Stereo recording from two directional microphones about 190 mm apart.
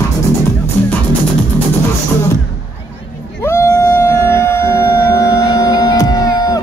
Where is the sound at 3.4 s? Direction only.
15° left (ahead or behind).